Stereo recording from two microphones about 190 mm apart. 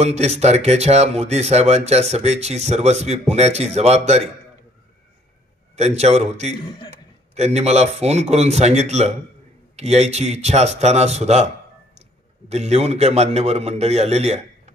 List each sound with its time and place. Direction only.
0.0 s speech: 35° right (ahead or behind)
5.8 s speech: 35° right (ahead or behind)
12.4 s speech: 35° right (ahead or behind)